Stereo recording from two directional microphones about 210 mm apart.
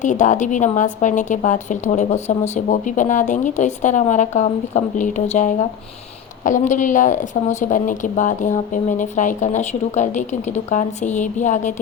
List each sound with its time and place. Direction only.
0.0 s a woman's voice: 35° left (ahead or behind)